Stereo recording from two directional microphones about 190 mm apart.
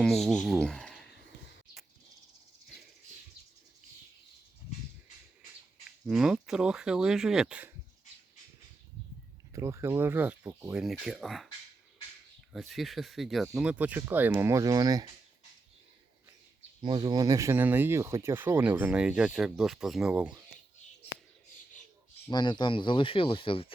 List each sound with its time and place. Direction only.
0.0 s speech: centre (ahead or behind)
6.1 s speech: 5° right (ahead or behind)
9.5 s speech: 15° right (ahead or behind); by 11.4 s centre (ahead or behind)
12.5 s speech: centre (ahead or behind); by 15.0 s 20° right (ahead or behind)
16.8 s speech: 25° right (ahead or behind); by 20.4 s 5° right (ahead or behind)
22.3 s speech: 25° left (ahead or behind)